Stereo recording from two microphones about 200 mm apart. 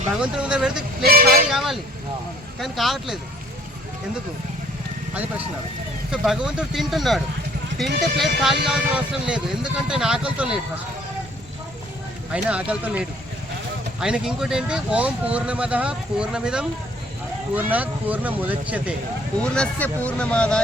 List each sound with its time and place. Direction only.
0.2 s speech: 5° right (ahead or behind)
1.0 s speech: 50° right (ahead or behind)
1.5 s speech: centre (ahead or behind)
6.1 s speech: 5° right (ahead or behind)
7.9 s speech: 55° right (ahead or behind)
8.2 s speech: centre (ahead or behind)
12.3 s speech: 5° right (ahead or behind)
19.4 s speech: 5° left (ahead or behind)